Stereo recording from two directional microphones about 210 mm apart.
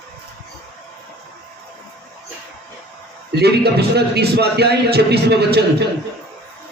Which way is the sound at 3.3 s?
50° right (ahead or behind).